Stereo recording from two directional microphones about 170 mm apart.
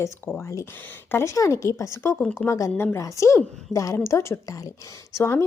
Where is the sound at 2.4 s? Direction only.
20° left (ahead or behind).